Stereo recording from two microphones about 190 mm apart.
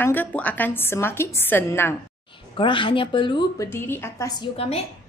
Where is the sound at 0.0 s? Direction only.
10° left (ahead or behind).